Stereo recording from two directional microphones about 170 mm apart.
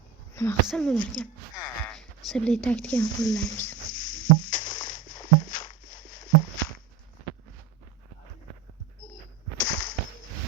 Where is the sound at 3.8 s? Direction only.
50° left (ahead or behind).